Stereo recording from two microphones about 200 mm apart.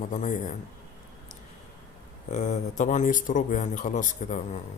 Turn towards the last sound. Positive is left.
turn(degrees=35)  # may be behind; listen again after turning